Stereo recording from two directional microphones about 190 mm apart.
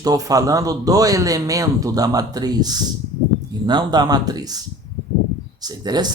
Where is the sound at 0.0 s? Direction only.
20° right (ahead or behind).